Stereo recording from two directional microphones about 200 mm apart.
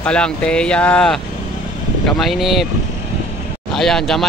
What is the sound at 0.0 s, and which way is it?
Speech, 5° left (ahead or behind).